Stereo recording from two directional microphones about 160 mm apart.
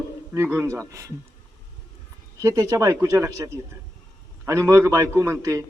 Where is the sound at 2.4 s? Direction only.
20° right (ahead or behind).